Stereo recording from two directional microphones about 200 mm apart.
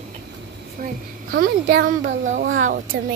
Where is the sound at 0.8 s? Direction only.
45° right (ahead or behind).